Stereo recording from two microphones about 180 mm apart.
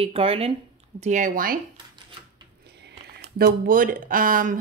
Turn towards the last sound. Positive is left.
turn(degrees=-50)  # may be behind; listen again after turning